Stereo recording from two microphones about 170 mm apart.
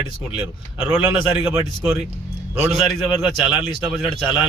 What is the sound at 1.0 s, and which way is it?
Speech, 5° right (ahead or behind).